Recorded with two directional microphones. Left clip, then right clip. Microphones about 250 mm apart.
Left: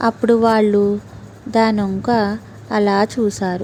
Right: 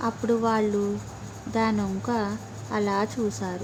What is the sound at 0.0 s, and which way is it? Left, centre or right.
A woman's voice, left.